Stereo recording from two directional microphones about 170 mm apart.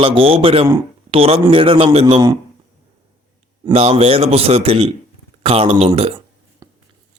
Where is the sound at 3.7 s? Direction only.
35° right (ahead or behind).